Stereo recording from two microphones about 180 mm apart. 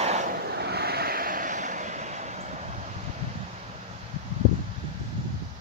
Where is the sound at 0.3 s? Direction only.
65° right (ahead or behind); by 2.7 s 40° right (ahead or behind).